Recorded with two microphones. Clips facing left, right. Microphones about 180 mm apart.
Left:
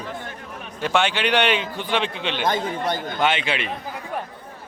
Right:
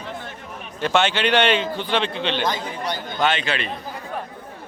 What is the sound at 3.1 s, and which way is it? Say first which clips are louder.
Speech: right 3 dB; 10° left (ahead or behind).